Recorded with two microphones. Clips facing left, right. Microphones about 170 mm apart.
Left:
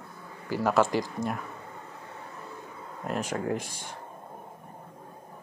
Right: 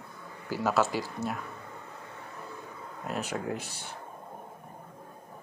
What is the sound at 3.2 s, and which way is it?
Speech, 10° right (ahead or behind).